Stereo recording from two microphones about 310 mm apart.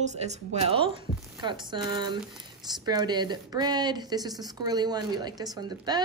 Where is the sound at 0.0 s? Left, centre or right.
Right.